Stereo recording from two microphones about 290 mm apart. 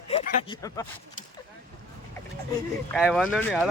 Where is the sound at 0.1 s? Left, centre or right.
Centre.